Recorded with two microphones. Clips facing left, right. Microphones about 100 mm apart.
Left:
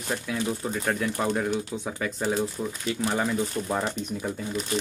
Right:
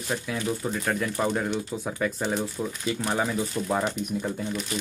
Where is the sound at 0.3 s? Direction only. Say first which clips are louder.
Even; 5° left (ahead or behind).